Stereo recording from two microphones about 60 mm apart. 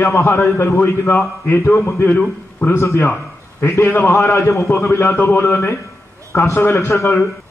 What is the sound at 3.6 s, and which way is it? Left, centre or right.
A man's voice, left.